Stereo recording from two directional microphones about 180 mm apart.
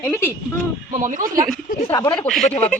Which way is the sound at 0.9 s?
45° right (ahead or behind).